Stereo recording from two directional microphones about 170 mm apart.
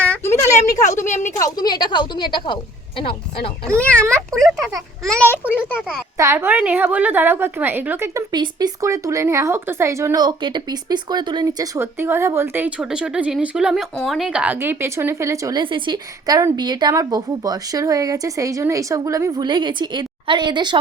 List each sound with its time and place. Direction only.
0.1 s a sound: 15° left (ahead or behind)
1.0 s speech: 45° left (ahead or behind)
1.5 s a woman's voice: 25° left (ahead or behind)
3.8 s a child's voice: 5° left (ahead or behind)
5.4 s a woman's voice: 10° right (ahead or behind); by 20.7 s 25° right (ahead or behind)